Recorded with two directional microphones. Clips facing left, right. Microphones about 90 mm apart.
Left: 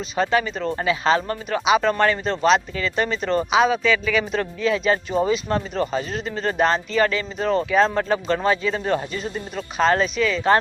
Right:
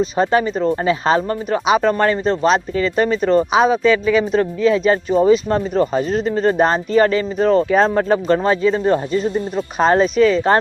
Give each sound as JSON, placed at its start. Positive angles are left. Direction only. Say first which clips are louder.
{"t": 0.0, "sound": "speech", "louder": "right 5 dB", "side_deg": -40}